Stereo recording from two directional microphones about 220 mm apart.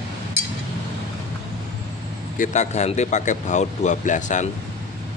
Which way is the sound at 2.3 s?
35° left (ahead or behind).